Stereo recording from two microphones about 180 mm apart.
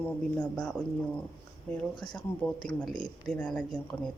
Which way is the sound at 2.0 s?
25° left (ahead or behind).